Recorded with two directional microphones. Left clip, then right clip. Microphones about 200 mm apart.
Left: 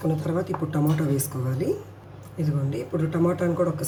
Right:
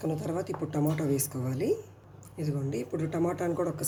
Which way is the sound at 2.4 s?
35° right (ahead or behind).